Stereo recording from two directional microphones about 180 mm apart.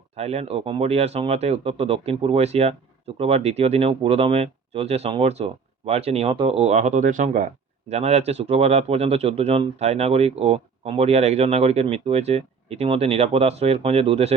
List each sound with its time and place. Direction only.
0.2 s speech: 35° right (ahead or behind)